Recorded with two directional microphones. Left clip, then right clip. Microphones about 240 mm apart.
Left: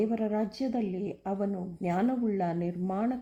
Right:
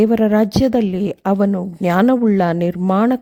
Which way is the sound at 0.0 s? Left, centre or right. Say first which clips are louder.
Right 15 dB; right.